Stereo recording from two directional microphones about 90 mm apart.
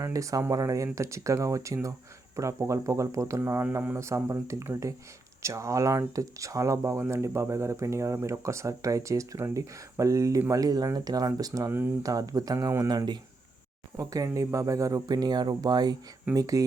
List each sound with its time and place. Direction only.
0.0 s speech: 35° right (ahead or behind)
11.7 s speech: 25° right (ahead or behind)
12.0 s speech: 45° right (ahead or behind)